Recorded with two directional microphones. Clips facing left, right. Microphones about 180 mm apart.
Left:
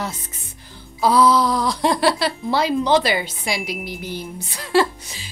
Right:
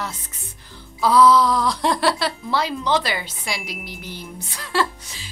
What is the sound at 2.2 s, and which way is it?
A woman's voice, 15° left (ahead or behind).